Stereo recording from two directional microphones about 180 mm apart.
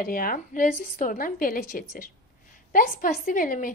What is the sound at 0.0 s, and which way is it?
A woman's voice, 50° left (ahead or behind).